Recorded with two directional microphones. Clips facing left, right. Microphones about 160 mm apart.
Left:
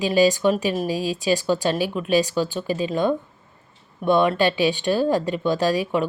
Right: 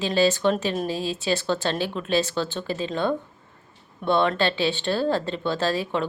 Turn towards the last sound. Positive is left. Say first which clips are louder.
# left 4 dB
turn(degrees=15)  # may be behind; listen again after turning